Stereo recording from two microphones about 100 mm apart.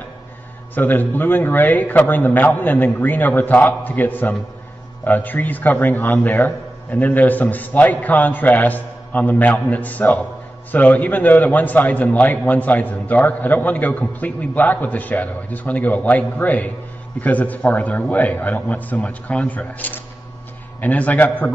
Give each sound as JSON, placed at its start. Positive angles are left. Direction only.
{"t": 0.7, "sound": "a man's voice", "side_deg": 20}